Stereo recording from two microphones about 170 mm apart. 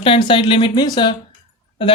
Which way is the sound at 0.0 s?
30° left (ahead or behind).